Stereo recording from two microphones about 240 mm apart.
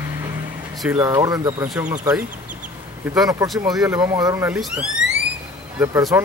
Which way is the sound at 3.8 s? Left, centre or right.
Centre.